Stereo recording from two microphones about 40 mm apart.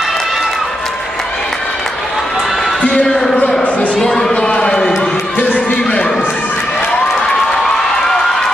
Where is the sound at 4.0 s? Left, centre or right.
Centre.